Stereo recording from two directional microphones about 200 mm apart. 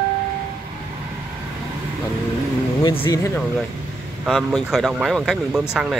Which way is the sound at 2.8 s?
25° left (ahead or behind).